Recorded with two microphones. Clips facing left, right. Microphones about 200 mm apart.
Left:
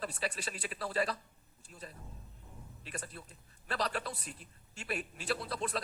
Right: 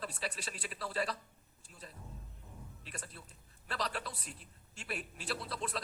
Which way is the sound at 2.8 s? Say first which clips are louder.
Left 6 dB; 50° left (ahead or behind).